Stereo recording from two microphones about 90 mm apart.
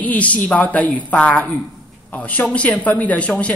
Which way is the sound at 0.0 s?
15° left (ahead or behind).